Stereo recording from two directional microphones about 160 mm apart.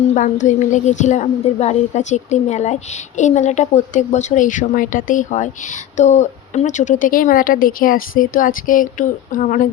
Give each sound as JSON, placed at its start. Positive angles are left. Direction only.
{"t": 0.1, "sound": "a woman's voice", "side_deg": 50}